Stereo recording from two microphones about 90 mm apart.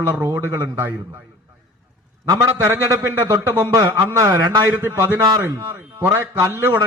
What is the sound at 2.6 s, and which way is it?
Speech, 30° right (ahead or behind).